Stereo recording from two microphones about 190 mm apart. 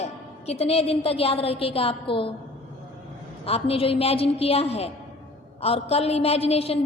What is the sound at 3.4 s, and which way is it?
A woman's voice, 30° left (ahead or behind).